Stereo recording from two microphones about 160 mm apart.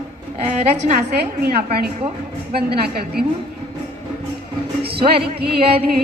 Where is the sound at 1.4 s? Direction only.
75° right (ahead or behind).